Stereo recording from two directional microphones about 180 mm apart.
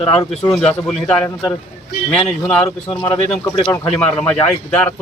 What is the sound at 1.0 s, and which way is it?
Speech, 5° left (ahead or behind).